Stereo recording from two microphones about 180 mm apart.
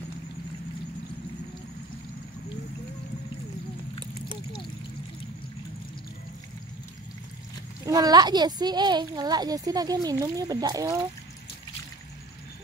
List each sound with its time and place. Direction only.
7.8 s speech: 20° right (ahead or behind)